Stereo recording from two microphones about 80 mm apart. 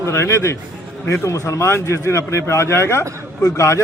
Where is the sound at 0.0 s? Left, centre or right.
Left.